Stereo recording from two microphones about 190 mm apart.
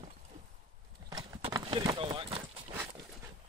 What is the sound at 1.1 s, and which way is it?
Clip-clop, 20° right (ahead or behind).